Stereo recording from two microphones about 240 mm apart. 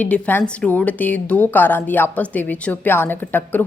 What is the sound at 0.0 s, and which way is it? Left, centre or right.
A woman's voice, centre.